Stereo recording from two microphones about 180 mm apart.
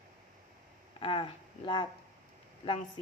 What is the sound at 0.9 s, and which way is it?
Speech, 30° left (ahead or behind).